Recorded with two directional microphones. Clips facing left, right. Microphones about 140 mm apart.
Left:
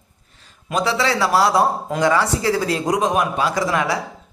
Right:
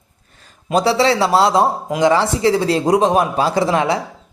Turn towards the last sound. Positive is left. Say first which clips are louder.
# right 4 dB
turn(degrees=-25)  # may be behind; listen again after turning